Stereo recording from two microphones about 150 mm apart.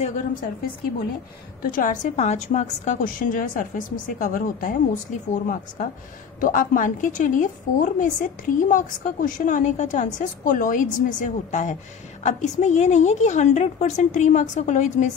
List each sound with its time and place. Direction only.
0.0 s a woman's voice: 60° left (ahead or behind)
1.6 s a woman's voice: 65° left (ahead or behind)